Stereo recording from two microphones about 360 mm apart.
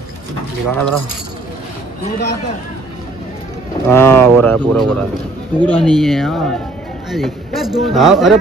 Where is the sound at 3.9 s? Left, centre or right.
Centre.